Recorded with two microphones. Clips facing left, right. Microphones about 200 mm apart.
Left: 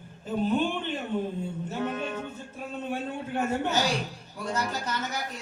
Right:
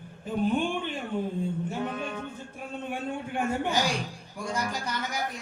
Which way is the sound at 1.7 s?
15° right (ahead or behind).